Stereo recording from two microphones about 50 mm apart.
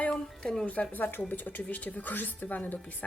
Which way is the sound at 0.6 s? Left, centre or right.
Left.